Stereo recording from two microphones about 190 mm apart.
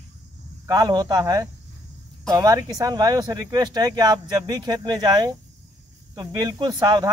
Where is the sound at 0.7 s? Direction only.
20° right (ahead or behind).